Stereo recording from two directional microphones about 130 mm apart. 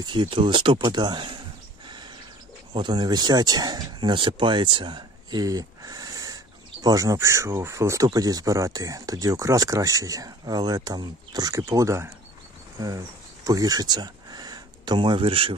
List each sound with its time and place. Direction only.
0.0 s speech: 35° right (ahead or behind)
1.9 s a sound: 35° right (ahead or behind)
2.7 s speech: 35° right (ahead or behind)